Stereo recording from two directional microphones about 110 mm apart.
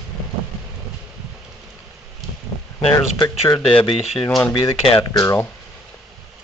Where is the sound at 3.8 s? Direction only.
55° left (ahead or behind).